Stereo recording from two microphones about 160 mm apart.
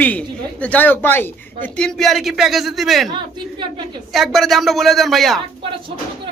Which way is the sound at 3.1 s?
30° right (ahead or behind).